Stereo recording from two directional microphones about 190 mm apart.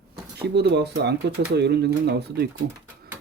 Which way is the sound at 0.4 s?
60° right (ahead or behind).